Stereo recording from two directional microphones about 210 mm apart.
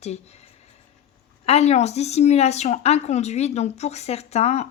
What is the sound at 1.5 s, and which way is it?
A woman's voice, 30° left (ahead or behind).